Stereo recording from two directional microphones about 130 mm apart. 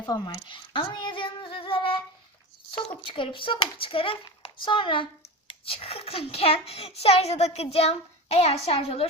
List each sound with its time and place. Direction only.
0.0 s a child's voice: 30° left (ahead or behind)